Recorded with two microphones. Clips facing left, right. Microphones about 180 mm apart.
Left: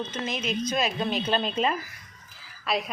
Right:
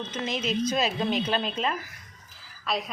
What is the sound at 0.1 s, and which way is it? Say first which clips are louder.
A woman's voice: right 1 dB; 25° right (ahead or behind).